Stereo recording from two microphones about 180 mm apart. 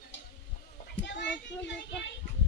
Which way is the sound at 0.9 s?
80° left.